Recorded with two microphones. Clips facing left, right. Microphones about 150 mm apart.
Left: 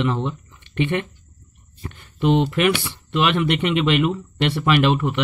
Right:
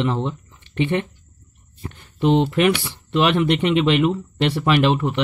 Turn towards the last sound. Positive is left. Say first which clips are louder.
# even
turn(degrees=-30)  # may be behind; listen again after turning